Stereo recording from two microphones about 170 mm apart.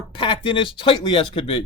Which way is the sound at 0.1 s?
30° left (ahead or behind).